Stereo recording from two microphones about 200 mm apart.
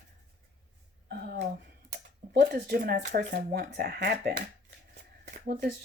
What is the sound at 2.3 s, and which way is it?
Speech, 50° right (ahead or behind).